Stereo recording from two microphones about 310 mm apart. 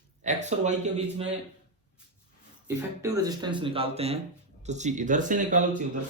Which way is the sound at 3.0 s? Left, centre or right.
Centre.